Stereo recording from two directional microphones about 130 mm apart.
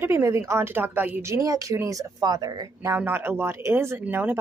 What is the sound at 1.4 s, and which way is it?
A woman's voice, 25° right (ahead or behind).